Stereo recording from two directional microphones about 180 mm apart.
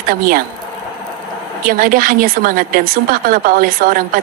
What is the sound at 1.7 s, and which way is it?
A woman's voice, 50° right (ahead or behind).